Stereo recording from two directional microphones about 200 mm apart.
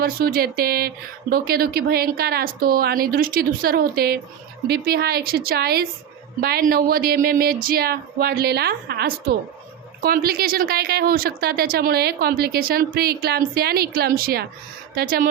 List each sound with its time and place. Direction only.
0.0 s a woman's voice: 50° right (ahead or behind)